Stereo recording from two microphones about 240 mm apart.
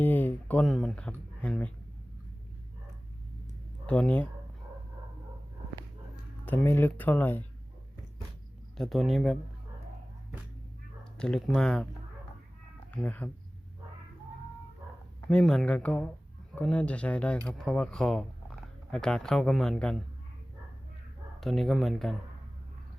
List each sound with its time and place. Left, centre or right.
0.0 s speech: centre
3.8 s a man's voice: centre
6.4 s speech: centre
8.8 s a man's voice: centre
11.2 s a man's voice: centre
12.9 s speech: centre
15.3 s a man's voice: centre
21.4 s a man's voice: centre